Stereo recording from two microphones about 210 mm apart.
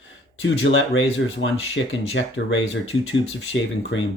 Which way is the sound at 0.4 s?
65° left (ahead or behind).